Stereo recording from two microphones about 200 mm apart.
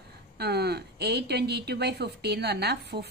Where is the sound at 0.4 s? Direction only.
55° right (ahead or behind).